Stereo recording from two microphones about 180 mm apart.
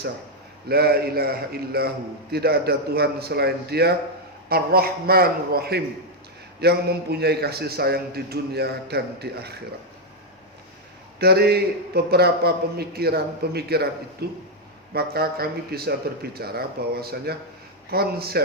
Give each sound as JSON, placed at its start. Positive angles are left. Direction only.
{"t": 0.7, "sound": "a man's voice", "side_deg": -60}
{"t": 11.2, "sound": "a man's voice", "side_deg": -60}